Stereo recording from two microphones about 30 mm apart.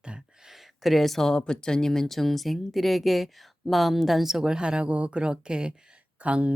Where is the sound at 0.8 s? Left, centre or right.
Centre.